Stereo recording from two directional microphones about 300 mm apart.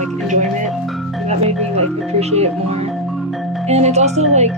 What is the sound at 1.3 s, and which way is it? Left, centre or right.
Speech, right.